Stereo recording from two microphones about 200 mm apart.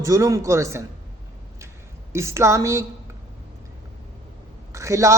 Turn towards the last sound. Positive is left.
turn(degrees=-15)  # may be behind; listen again after turning